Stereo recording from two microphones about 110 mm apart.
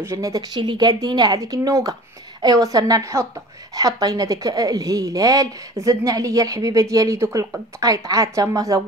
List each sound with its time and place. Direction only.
0.0 s a woman's voice: 30° right (ahead or behind)